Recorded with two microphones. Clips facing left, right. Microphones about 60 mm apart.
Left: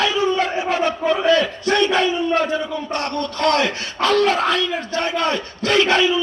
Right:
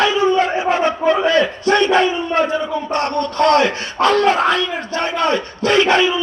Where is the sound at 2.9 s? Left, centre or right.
Right.